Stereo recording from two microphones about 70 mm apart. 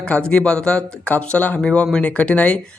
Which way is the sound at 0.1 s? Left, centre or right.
Centre.